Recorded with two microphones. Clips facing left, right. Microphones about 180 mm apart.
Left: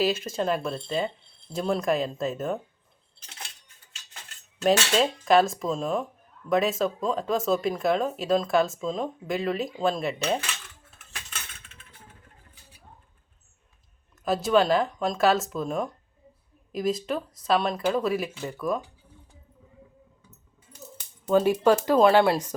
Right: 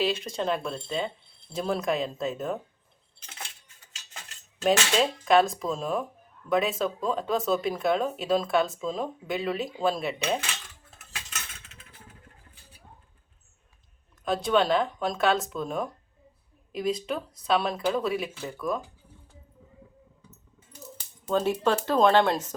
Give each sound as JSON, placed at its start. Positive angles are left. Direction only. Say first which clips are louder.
{"t": 0.0, "sound": "speech", "louder": "left 2 dB", "side_deg": 5}
{"t": 4.6, "sound": "speech", "louder": "left 1 dB", "side_deg": 0}
{"t": 14.3, "sound": "speech", "louder": "left 2 dB", "side_deg": 5}
{"t": 21.2, "sound": "speech", "louder": "left 5 dB", "side_deg": 10}